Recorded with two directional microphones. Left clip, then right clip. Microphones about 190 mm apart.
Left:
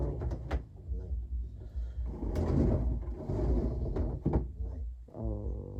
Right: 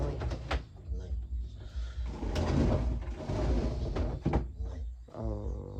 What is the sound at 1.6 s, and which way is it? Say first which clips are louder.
Music: right 5 dB; 45° left (ahead or behind).